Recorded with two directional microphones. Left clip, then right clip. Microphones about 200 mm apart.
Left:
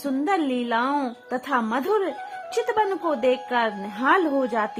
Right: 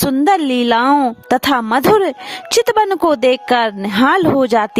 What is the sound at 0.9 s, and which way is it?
A woman's voice, 50° right (ahead or behind).